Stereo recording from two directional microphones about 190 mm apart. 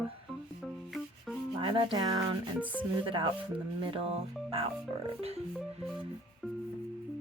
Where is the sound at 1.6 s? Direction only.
25° right (ahead or behind).